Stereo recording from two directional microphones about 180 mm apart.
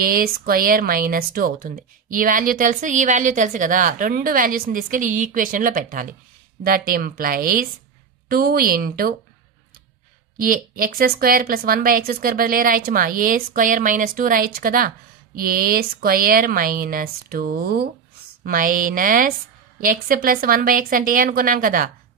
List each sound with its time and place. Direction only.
0.0 s speech: 55° right (ahead or behind)
10.3 s speech: 50° right (ahead or behind)